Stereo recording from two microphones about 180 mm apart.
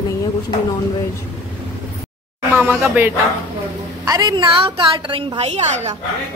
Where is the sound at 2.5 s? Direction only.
10° right (ahead or behind).